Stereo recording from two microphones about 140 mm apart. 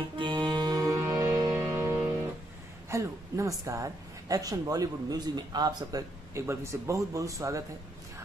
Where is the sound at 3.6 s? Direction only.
25° right (ahead or behind).